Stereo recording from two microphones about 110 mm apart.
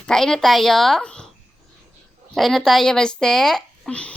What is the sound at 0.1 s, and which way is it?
A woman's voice, 5° left (ahead or behind).